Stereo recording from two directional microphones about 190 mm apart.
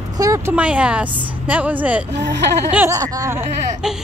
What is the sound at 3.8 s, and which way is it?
Speech, 5° right (ahead or behind).